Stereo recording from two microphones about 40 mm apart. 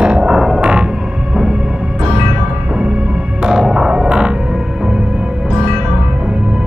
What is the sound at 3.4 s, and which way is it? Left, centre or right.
Music, centre.